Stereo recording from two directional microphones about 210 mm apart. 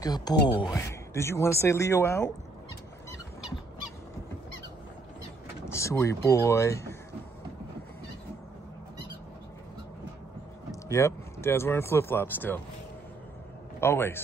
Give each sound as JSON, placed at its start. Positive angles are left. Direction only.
{"t": 0.0, "sound": "speech", "side_deg": 20}
{"t": 5.7, "sound": "speech", "side_deg": 15}
{"t": 10.9, "sound": "speech", "side_deg": 15}
{"t": 13.7, "sound": "speech", "side_deg": 10}